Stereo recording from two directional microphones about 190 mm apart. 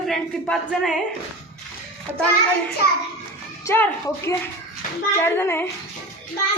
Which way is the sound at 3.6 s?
10° left (ahead or behind).